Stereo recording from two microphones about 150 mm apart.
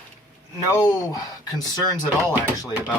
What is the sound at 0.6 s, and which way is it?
Speech, 25° left (ahead or behind).